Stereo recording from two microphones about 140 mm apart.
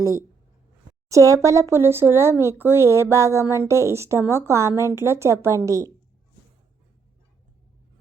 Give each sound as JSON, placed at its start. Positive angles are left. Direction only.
{"t": 1.1, "sound": "speech", "side_deg": -20}